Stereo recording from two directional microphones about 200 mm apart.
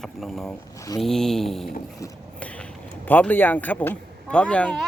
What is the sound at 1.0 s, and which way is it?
Speech, centre (ahead or behind).